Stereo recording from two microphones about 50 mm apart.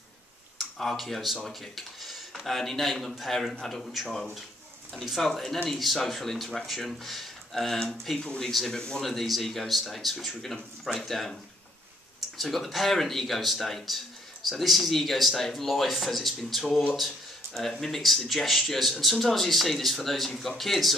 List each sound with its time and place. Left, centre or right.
0.7 s speech: centre
9.0 s speech: centre
12.4 s speech: centre